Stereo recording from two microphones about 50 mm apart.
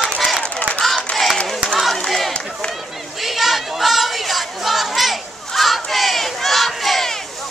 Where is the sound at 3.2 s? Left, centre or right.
Centre.